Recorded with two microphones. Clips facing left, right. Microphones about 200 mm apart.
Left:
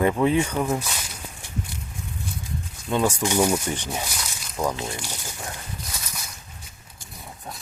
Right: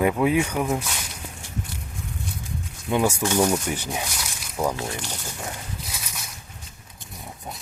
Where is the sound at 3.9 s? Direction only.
Centre (ahead or behind).